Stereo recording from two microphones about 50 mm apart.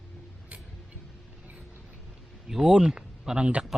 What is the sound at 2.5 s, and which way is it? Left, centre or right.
Speech, centre.